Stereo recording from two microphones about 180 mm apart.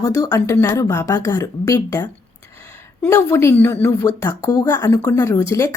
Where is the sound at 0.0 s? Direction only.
20° left (ahead or behind).